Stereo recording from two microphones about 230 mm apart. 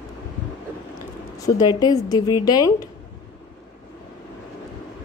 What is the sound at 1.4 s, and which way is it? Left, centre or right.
A woman's voice, centre.